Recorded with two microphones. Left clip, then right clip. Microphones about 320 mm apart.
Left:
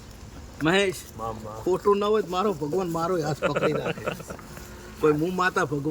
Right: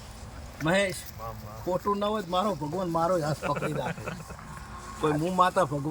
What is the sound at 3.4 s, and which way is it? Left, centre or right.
Speech, left.